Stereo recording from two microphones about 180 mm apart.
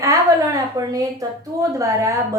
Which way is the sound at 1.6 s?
20° right (ahead or behind).